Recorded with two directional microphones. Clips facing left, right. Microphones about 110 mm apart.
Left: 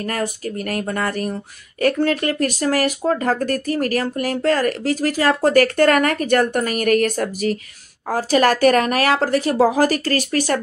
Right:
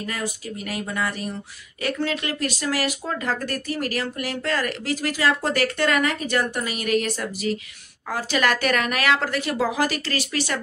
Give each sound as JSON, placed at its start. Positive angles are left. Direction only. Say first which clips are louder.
{"t": 0.0, "sound": "speech", "louder": "left 6 dB", "side_deg": 50}